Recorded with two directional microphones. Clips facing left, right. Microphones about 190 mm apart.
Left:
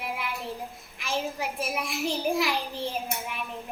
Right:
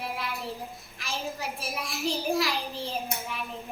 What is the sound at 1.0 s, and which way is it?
A child's voice, 15° left (ahead or behind).